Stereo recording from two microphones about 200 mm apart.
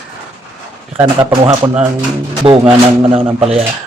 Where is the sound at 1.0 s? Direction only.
15° right (ahead or behind).